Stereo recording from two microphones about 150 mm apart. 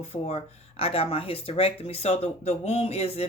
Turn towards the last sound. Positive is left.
turn(degrees=45)  # may be behind; listen again after turning